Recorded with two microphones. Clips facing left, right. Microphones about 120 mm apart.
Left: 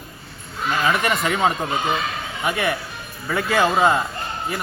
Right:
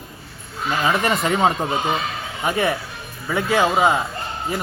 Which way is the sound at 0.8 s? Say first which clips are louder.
Right 1 dB; 30° right (ahead or behind).